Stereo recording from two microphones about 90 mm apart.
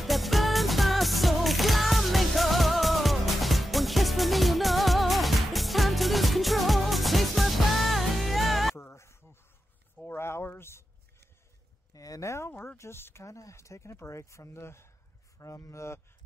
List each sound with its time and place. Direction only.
0.0 s music: centre (ahead or behind)
8.7 s music: 30° left (ahead or behind)
10.0 s a sound: 30° left (ahead or behind)
11.9 s speech: 40° left (ahead or behind)